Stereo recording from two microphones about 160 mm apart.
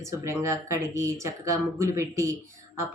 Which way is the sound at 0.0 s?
20° right (ahead or behind).